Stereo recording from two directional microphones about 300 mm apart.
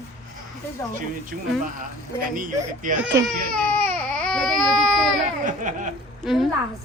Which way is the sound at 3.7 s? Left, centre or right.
Centre.